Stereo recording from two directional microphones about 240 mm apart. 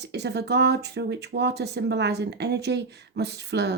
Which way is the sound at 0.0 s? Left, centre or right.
Right.